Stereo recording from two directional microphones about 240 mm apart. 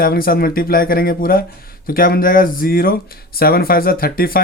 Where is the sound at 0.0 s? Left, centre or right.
Left.